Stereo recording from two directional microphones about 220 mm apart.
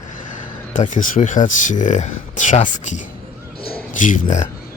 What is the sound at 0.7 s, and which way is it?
Speech, 35° left (ahead or behind).